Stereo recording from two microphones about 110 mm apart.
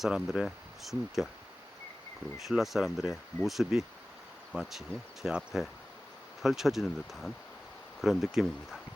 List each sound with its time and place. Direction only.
0.0 s speech: 5° right (ahead or behind)
2.5 s speech: 5° right (ahead or behind)